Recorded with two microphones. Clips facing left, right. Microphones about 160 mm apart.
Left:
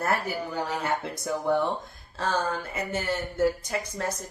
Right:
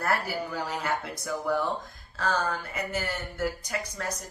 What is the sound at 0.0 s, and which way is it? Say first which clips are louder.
Speech: left 1 dB; 25° left (ahead or behind).